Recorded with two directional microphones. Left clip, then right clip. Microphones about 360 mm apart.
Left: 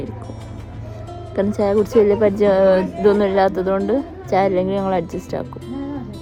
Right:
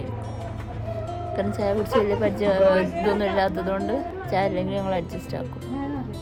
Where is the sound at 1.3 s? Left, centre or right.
Centre.